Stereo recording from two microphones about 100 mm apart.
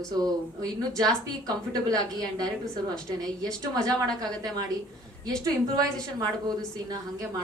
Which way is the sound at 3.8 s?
40° right (ahead or behind).